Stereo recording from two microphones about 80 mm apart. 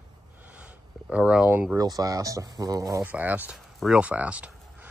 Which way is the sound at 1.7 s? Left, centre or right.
Right.